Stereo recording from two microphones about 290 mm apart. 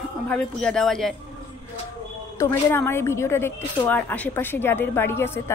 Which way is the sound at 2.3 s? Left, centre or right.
Centre.